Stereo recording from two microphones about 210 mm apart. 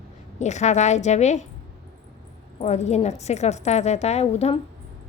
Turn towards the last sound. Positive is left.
turn(degrees=30)  # may be behind; listen again after turning